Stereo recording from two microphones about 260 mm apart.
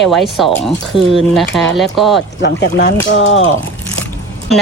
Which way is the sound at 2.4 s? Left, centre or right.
Left.